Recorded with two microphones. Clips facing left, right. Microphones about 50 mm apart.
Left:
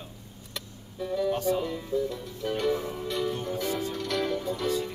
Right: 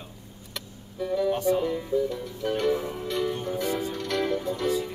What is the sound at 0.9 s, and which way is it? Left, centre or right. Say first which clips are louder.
Music: right 3 dB; centre.